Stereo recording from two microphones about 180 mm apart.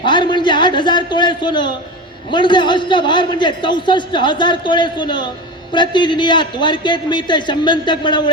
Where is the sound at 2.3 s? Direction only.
25° left (ahead or behind).